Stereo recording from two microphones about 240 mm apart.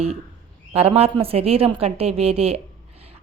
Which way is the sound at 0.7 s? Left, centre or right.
Right.